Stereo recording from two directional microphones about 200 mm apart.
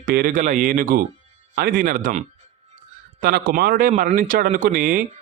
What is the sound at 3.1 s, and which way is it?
Speech, 50° right (ahead or behind).